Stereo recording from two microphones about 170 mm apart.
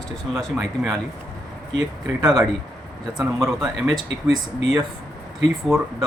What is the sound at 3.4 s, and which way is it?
Speech, 20° right (ahead or behind).